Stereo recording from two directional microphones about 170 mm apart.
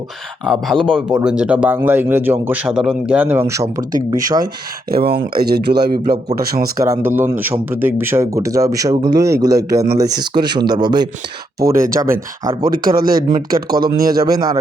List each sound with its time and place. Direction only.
0.4 s speech: centre (ahead or behind); by 4.4 s 20° right (ahead or behind)
4.9 s speech: 65° right (ahead or behind)
6.8 s speech: 15° right (ahead or behind)
12.6 s speech: 60° right (ahead or behind)
14.3 s speech: 20° right (ahead or behind)